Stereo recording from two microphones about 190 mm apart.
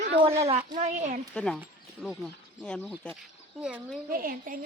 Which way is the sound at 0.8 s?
40° right (ahead or behind).